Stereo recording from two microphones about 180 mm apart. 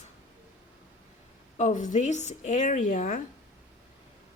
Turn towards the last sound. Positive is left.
turn(degrees=45)  # may be behind; listen again after turning